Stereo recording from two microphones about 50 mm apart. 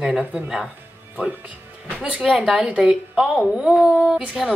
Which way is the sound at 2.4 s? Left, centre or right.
Centre.